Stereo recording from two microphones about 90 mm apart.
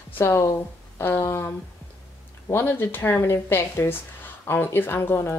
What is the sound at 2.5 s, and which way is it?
Speech, 20° left (ahead or behind).